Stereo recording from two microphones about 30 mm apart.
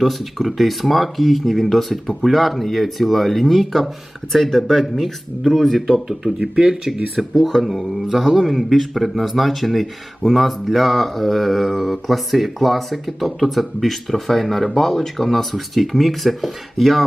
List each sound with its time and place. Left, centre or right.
0.0 s speech: centre
6.4 s speech: right
7.3 s speech: centre
7.9 s speech: centre